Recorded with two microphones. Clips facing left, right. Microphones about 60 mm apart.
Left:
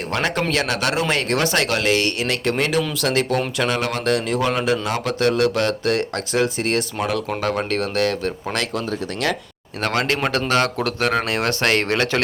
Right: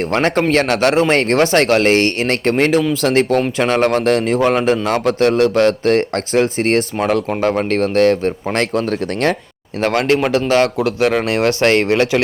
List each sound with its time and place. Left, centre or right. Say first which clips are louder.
0.0 s speech: right 7 dB; right
9.8 s speech: right 6 dB; right